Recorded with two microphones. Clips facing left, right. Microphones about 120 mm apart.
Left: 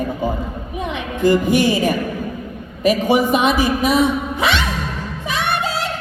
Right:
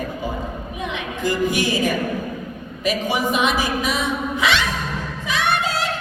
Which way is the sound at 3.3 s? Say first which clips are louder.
Left 4 dB; 55° left (ahead or behind).